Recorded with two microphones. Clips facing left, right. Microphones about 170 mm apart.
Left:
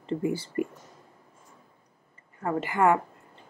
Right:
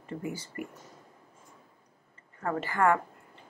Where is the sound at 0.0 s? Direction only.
30° left (ahead or behind).